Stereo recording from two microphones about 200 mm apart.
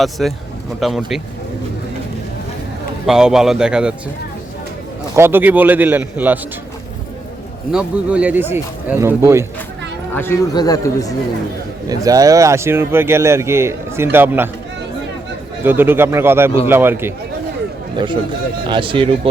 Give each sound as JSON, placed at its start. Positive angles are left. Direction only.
{"t": 0.0, "sound": "a man's voice", "side_deg": 0}
{"t": 3.1, "sound": "a man's voice", "side_deg": -5}
{"t": 5.1, "sound": "speech", "side_deg": -10}
{"t": 7.7, "sound": "speech", "side_deg": -5}
{"t": 10.2, "sound": "speech", "side_deg": 15}
{"t": 11.9, "sound": "speech", "side_deg": -20}
{"t": 15.6, "sound": "speech", "side_deg": -10}
{"t": 17.9, "sound": "speech", "side_deg": -25}